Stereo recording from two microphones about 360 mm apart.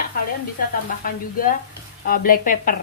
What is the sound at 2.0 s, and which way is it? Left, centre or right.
Speech, left.